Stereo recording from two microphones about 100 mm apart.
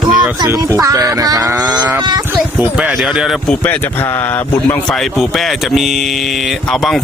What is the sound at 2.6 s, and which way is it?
Speech, 15° right (ahead or behind).